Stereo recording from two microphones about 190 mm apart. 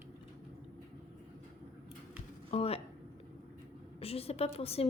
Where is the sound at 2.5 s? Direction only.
30° left (ahead or behind).